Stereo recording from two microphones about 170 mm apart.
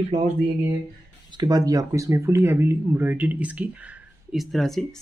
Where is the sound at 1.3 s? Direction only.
25° right (ahead or behind); by 4.9 s centre (ahead or behind).